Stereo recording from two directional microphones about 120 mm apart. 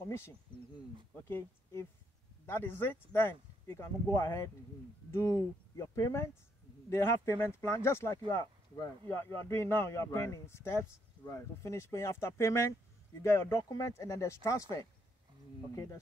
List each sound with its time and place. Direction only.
1.2 s a man's voice: 20° left (ahead or behind)
8.7 s speech: 35° left (ahead or behind)
9.1 s a man's voice: 20° left (ahead or behind)